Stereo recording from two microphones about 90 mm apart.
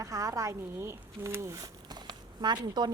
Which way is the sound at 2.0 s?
55° right (ahead or behind).